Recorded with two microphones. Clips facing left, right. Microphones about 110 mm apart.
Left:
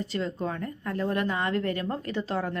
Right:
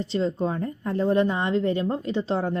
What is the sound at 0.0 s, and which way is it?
A woman's voice, 25° right (ahead or behind).